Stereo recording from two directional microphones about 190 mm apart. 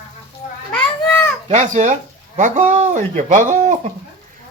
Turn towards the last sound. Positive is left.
turn(degrees=-40)  # may be behind; listen again after turning